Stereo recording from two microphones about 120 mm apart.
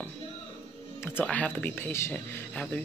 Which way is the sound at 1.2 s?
10° left (ahead or behind).